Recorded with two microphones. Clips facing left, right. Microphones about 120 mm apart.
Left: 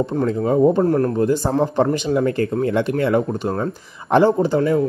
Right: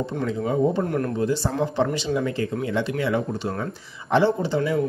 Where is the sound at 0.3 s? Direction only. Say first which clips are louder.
Left 6 dB; 45° left (ahead or behind).